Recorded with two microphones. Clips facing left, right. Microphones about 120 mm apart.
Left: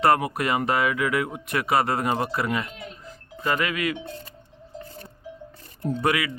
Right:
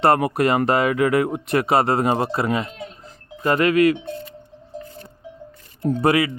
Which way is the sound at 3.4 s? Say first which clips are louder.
Right 9 dB; 40° right (ahead or behind).